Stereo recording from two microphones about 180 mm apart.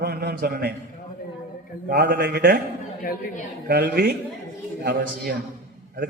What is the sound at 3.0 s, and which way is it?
Speech, 50° left (ahead or behind).